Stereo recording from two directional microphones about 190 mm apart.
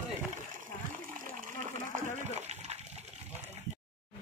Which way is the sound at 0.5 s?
45° right (ahead or behind).